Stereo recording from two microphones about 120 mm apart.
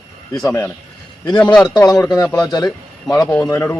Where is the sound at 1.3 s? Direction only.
10° left (ahead or behind).